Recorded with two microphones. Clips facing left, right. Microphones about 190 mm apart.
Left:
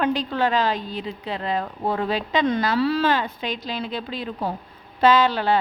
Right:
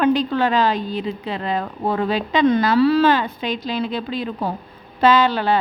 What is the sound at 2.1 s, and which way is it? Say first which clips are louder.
A woman's voice: right 7 dB; 75° right (ahead or behind).